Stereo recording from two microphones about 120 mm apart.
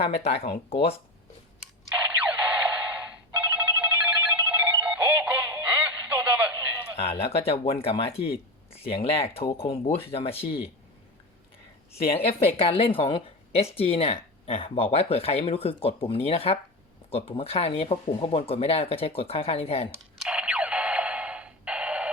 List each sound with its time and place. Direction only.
0.0 s speech: 60° left (ahead or behind)
2.0 s ringtone: 10° right (ahead or behind)
6.9 s speech: 55° left (ahead or behind)
11.9 s a woman's voice: 60° left (ahead or behind)
20.1 s music: 10° right (ahead or behind)